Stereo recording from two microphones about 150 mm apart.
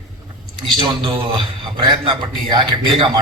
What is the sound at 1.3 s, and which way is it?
A man's voice, 30° right (ahead or behind).